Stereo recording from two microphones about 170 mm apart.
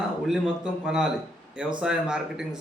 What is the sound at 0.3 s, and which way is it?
A man's voice, 5° right (ahead or behind).